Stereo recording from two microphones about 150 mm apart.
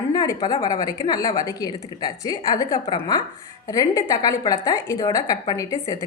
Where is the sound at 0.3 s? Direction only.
30° left (ahead or behind).